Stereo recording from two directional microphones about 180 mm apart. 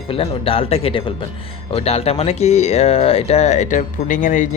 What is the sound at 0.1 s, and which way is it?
Speech, 30° left (ahead or behind).